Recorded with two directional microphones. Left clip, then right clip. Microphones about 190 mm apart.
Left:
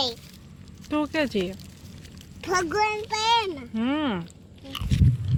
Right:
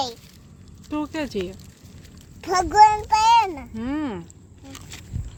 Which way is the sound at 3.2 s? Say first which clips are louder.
Right 5 dB; 20° right (ahead or behind).